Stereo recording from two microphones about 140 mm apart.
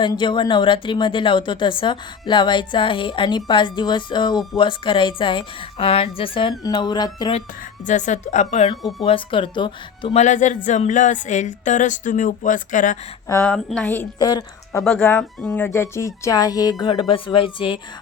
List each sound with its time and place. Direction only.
0.0 s a woman's voice: 35° left (ahead or behind)
7.9 s speech: 60° left (ahead or behind)
8.8 s speech: centre (ahead or behind)
9.0 s a woman's voice: 40° left (ahead or behind)
10.2 s speech: 60° left (ahead or behind)
13.2 s speech: 15° left (ahead or behind)
13.5 s a woman's voice: 5° left (ahead or behind)
14.2 s speech: 30° left (ahead or behind)
14.8 s speech: 5° left (ahead or behind)
15.6 s speech: 20° left (ahead or behind)
16.9 s a woman's voice: 40° left (ahead or behind)